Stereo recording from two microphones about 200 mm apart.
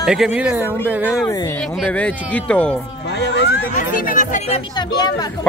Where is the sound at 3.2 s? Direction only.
60° left (ahead or behind).